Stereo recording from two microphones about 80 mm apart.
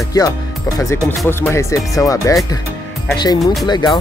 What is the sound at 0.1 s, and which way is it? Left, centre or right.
Speech, left.